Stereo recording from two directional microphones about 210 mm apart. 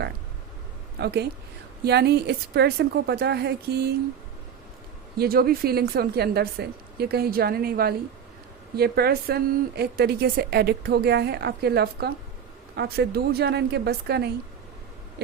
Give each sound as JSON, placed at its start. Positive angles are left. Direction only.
{"t": 0.9, "sound": "a woman's voice", "side_deg": -50}
{"t": 5.1, "sound": "a woman's voice", "side_deg": -45}